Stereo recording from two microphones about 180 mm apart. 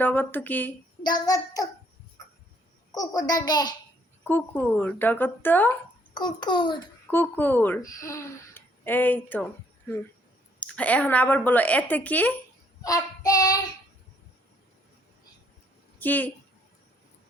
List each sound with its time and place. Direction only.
0.0 s a child's voice: 10° left (ahead or behind)
1.0 s a child's voice: 20° left (ahead or behind)
2.9 s a child's voice: 20° left (ahead or behind)
4.3 s a child's voice: 10° left (ahead or behind)
6.1 s a child's voice: 25° left (ahead or behind)
7.1 s a child's voice: 10° left (ahead or behind)
10.6 s a child's voice: 5° left (ahead or behind)
12.8 s child singing: 20° left (ahead or behind)
16.0 s a woman's voice: 10° left (ahead or behind)